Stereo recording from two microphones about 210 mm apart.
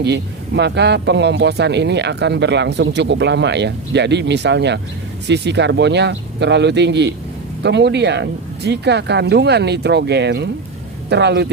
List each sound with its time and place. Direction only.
0.0 s speech: 55° right (ahead or behind)